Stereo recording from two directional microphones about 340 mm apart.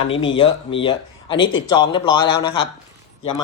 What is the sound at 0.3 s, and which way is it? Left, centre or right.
Speech, centre.